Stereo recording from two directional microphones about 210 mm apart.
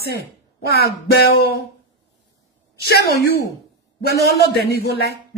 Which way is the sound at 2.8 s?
50° left (ahead or behind).